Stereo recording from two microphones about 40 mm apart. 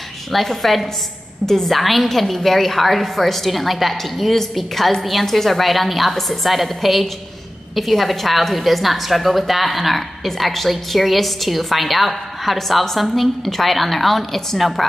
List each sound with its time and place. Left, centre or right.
0.3 s a woman's voice: centre